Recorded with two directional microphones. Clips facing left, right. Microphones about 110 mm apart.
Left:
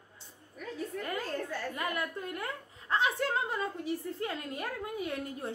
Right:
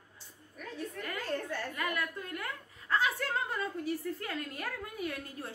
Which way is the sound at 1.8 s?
25° left (ahead or behind).